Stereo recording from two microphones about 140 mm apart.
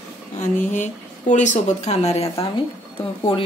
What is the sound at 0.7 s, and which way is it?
A woman's voice, 60° left (ahead or behind).